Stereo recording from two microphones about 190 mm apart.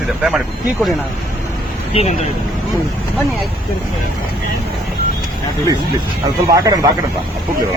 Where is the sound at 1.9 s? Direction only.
30° left (ahead or behind).